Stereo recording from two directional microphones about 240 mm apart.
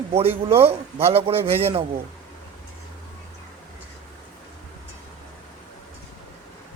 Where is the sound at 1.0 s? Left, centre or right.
Right.